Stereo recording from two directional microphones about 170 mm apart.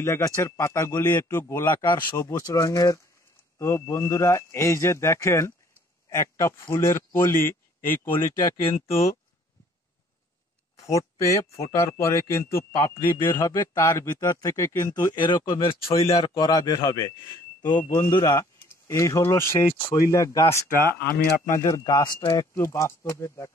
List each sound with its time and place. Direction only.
0.0 s a man's voice: 15° left (ahead or behind)
10.8 s speech: 20° left (ahead or behind)
20.6 s speech: 55° left (ahead or behind)
21.6 s speech: 20° left (ahead or behind)